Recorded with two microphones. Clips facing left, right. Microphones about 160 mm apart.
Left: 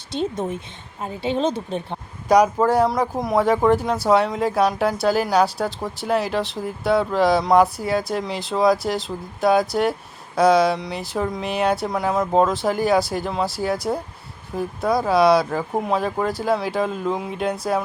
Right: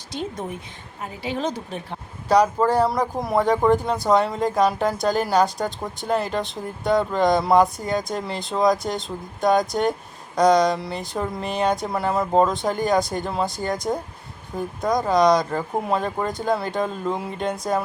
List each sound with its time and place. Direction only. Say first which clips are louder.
0.1 s a woman's voice: left 5 dB; 25° left (ahead or behind)
2.2 s speech: left 2 dB; 10° left (ahead or behind)
2.8 s speech: left 2 dB; centre (ahead or behind)